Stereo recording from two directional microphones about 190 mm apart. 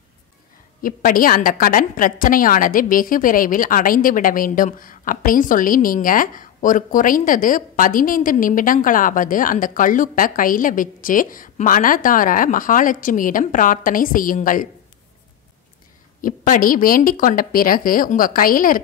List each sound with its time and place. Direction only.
0.8 s a woman's voice: 45° left (ahead or behind)
16.2 s a woman's voice: 45° left (ahead or behind)